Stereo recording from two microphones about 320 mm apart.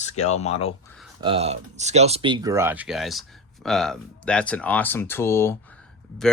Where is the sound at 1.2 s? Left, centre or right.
Centre.